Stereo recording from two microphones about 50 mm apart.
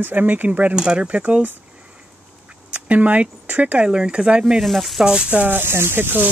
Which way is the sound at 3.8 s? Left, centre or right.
Centre.